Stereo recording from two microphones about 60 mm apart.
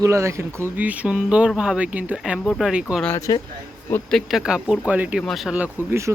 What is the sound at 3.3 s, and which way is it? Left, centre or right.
Speech, left.